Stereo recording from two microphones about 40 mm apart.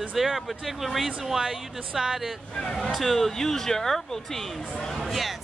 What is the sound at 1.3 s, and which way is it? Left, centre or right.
Speech, centre.